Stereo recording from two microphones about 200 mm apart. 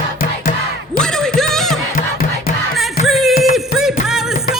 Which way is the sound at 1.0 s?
5° left (ahead or behind).